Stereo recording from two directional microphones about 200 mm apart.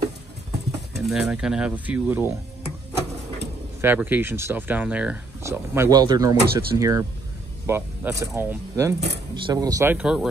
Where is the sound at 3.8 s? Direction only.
10° right (ahead or behind).